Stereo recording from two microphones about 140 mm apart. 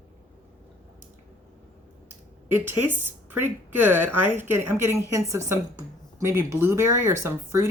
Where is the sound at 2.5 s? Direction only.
15° right (ahead or behind).